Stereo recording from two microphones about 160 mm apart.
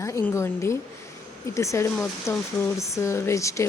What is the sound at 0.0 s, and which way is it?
Speech, 15° left (ahead or behind).